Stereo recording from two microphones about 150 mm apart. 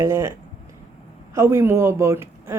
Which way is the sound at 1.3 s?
15° right (ahead or behind).